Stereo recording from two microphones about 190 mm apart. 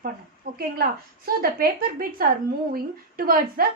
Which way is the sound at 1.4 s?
55° right (ahead or behind).